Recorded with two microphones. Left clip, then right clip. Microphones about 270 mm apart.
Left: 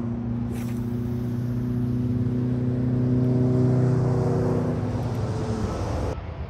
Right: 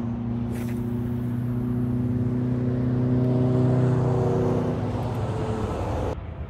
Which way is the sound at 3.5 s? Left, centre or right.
Right.